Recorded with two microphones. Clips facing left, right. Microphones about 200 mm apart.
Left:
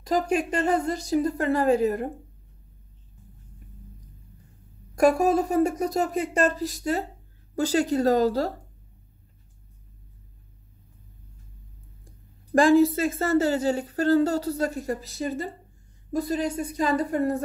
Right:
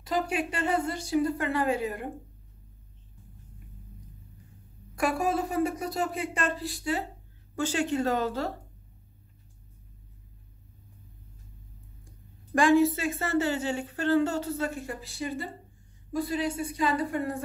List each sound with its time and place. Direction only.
0.0 s a woman's voice: 40° left (ahead or behind)
4.9 s a woman's voice: 40° left (ahead or behind)
12.5 s a woman's voice: 35° left (ahead or behind)